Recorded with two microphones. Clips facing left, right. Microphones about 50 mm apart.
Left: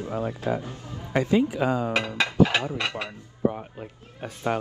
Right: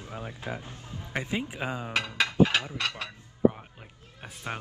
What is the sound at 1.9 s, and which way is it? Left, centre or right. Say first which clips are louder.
A man's voice: left 3 dB; centre.